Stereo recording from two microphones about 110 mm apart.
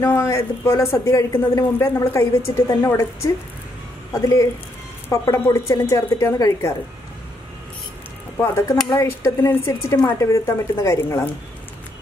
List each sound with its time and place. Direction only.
0.0 s a woman's voice: 25° left (ahead or behind)
8.4 s a woman's voice: 25° left (ahead or behind)